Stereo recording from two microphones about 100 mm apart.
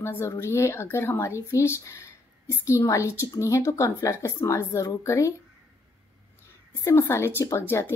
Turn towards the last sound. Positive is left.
turn(degrees=25)  # may be behind; listen again after turning